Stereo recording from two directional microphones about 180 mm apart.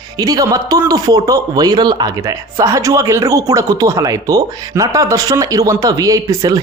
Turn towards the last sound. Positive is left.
turn(degrees=-20)  # may be behind; listen again after turning